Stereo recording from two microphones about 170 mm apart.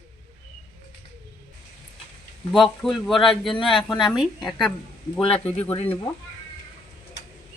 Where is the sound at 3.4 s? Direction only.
30° left (ahead or behind).